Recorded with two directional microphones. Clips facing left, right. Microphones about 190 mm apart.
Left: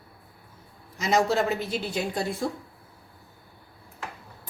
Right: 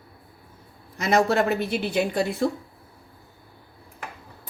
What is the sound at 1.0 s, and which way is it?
Speech, 60° right (ahead or behind).